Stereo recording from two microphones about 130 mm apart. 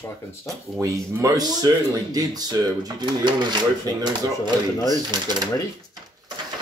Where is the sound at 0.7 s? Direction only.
25° right (ahead or behind).